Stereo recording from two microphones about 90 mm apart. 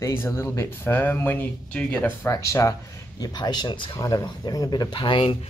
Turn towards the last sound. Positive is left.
turn(degrees=75)  # may be behind; listen again after turning